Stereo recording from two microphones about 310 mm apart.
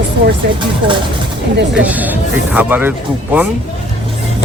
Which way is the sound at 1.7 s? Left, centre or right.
Centre.